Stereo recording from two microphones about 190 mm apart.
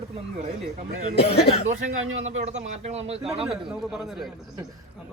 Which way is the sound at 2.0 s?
90° right.